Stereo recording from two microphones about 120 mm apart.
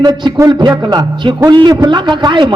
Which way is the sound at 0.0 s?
35° right (ahead or behind).